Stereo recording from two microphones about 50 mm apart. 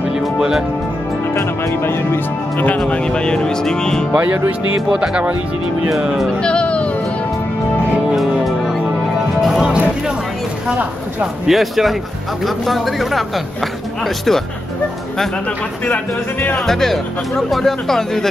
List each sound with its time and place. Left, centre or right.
0.4 s speech: centre
1.3 s speech: left
2.9 s speech: centre
4.1 s music: right
4.8 s speech: centre
5.9 s speech: centre
6.4 s music: centre
9.4 s music: centre
11.4 s speech: centre
16.5 s speech: centre